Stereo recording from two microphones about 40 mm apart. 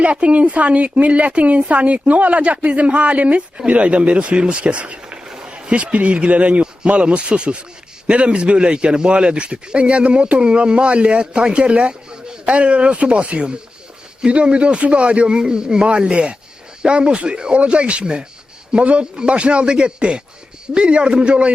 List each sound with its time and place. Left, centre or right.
0.0 s speech: right
5.1 s a man's voice: centre